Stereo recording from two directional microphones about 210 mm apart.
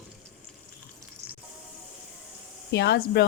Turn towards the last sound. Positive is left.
turn(degrees=55)  # may be behind; listen again after turning